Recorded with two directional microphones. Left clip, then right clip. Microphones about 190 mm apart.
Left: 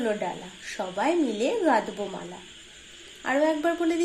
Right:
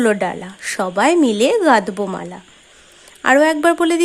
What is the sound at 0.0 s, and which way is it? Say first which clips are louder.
A woman's voice: right 11 dB; 50° right (ahead or behind).